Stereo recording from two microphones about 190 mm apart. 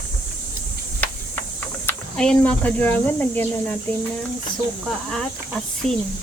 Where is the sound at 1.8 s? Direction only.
5° left (ahead or behind).